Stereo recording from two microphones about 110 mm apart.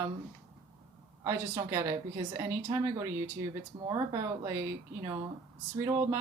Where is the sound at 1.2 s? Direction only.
25° right (ahead or behind).